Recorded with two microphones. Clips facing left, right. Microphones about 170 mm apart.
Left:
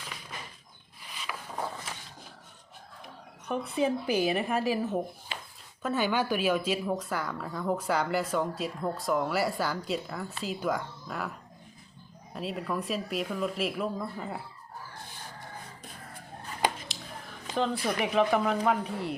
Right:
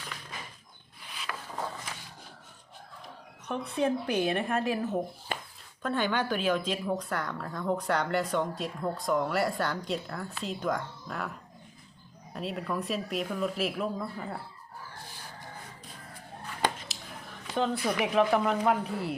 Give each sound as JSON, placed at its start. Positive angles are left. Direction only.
{"t": 1.2, "sound": "a sound", "side_deg": 10}
{"t": 3.5, "sound": "speech", "side_deg": 0}
{"t": 5.3, "sound": "a sound", "side_deg": -50}
{"t": 5.8, "sound": "speech", "side_deg": 5}
{"t": 12.3, "sound": "speech", "side_deg": 0}
{"t": 17.5, "sound": "speech", "side_deg": 0}